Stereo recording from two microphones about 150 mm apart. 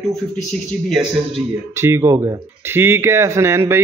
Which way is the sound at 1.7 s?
15° right (ahead or behind).